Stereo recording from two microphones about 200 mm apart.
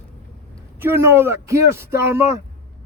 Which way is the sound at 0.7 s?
10° right (ahead or behind).